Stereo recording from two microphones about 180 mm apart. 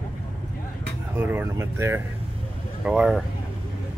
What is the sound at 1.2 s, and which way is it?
Speech, 10° right (ahead or behind).